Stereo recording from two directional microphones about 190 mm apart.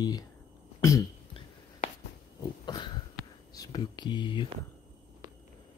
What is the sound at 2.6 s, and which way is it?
Cough, 25° left (ahead or behind).